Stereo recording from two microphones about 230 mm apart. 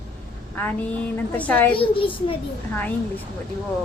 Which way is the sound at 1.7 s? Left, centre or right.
Left.